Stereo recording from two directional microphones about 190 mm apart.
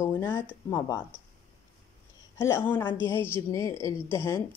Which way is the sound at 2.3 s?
10° left (ahead or behind).